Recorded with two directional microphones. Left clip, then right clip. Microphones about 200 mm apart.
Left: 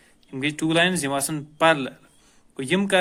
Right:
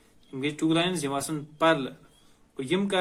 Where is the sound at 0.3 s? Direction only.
50° left (ahead or behind).